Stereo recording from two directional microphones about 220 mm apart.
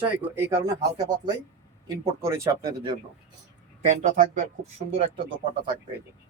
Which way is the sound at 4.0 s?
35° right (ahead or behind).